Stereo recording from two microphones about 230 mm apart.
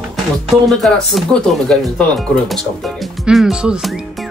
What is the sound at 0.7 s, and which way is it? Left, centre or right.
Speech, centre.